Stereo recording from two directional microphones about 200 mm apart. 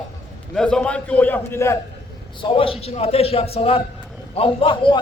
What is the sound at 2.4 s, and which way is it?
A man's voice, 25° left (ahead or behind).